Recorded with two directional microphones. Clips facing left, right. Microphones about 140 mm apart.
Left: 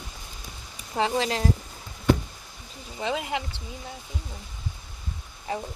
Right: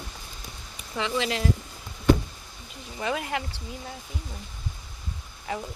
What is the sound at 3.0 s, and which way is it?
Speech, 25° left (ahead or behind).